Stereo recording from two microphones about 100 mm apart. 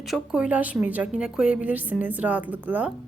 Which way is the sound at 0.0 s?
5° right (ahead or behind).